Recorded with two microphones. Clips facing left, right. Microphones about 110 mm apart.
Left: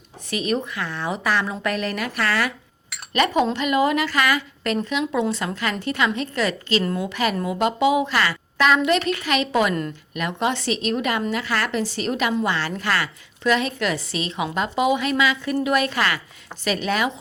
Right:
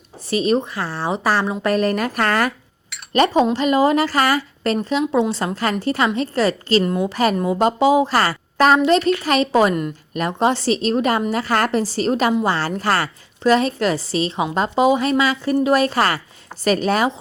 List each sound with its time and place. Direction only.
0.3 s a woman's voice: 30° right (ahead or behind)
6.8 s a woman's voice: 20° right (ahead or behind)
7.1 s a woman's voice: 40° right (ahead or behind)